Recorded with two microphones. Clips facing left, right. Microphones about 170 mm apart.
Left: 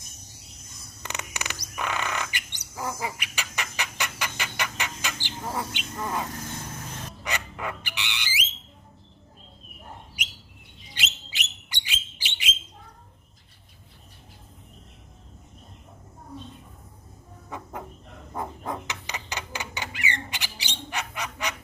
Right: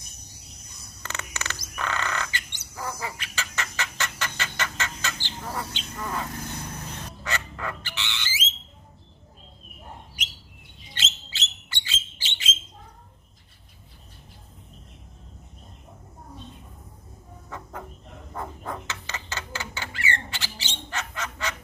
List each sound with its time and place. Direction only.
1.0 s bird: 15° left (ahead or behind)
2.7 s chicken: 20° left (ahead or behind)
5.2 s bird: 15° left (ahead or behind)
7.3 s bird: 15° left (ahead or behind)
10.9 s bird: 15° left (ahead or behind)
17.5 s chicken: 15° left (ahead or behind)
18.3 s a sound: 15° left (ahead or behind)